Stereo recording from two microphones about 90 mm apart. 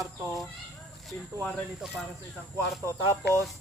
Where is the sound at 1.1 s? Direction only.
5° left (ahead or behind).